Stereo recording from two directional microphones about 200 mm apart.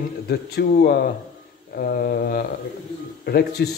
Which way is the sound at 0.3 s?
55° left (ahead or behind).